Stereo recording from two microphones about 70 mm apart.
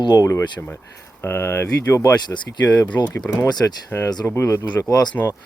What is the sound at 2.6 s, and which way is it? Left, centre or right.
Speech, left.